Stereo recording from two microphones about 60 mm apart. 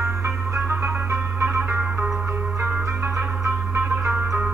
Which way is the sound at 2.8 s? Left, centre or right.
Right.